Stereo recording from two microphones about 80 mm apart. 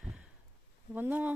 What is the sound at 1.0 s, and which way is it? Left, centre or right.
Speech, right.